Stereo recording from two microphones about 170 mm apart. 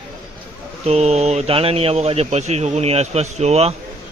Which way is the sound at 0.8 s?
40° right (ahead or behind).